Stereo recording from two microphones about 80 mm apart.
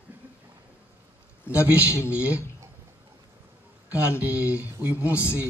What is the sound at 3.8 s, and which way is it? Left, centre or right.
Speech, centre.